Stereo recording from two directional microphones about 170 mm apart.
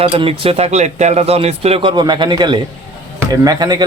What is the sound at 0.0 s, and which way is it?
Speech, 35° right (ahead or behind).